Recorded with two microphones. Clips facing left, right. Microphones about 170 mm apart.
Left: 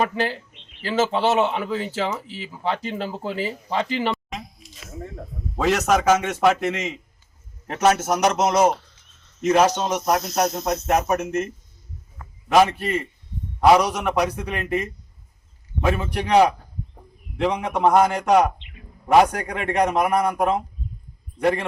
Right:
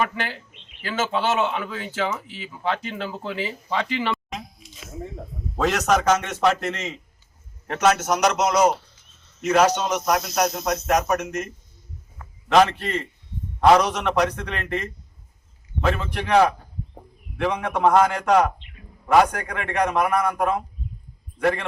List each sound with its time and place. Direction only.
0.8 s speech: 30° left (ahead or behind)
4.1 s speech: centre (ahead or behind)
7.9 s speech: 30° left (ahead or behind)
12.5 s a man's voice: 10° left (ahead or behind)